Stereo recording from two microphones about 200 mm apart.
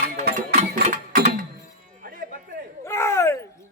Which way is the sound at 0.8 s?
40° right (ahead or behind).